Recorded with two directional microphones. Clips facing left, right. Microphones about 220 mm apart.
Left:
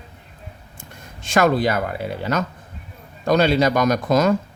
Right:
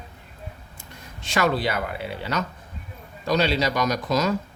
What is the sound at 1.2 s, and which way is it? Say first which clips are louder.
Speech: left 5 dB; 50° left (ahead or behind).